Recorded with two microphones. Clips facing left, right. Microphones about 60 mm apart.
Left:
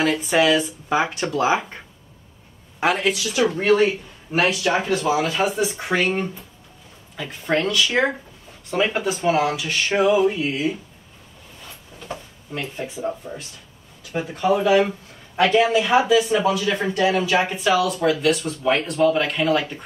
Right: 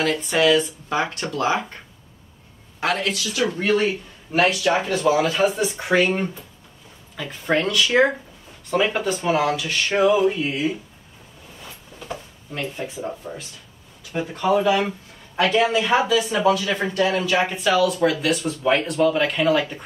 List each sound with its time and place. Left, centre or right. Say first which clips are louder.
0.2 s speech: even; centre
2.8 s speech: left 3 dB; centre
5.0 s speech: right 2 dB; centre
12.0 s drawer open or close: even; centre
14.1 s speech: even; centre
17.5 s speech: even; centre